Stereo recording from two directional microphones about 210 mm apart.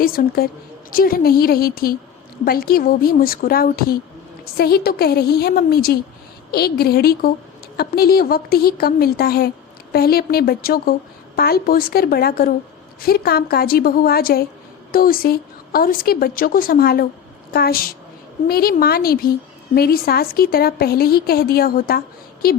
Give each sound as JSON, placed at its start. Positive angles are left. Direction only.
{"t": 0.0, "sound": "a woman's voice", "side_deg": 45}